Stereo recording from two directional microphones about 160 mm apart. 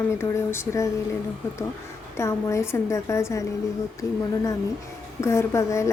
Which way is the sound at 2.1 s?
15° left (ahead or behind).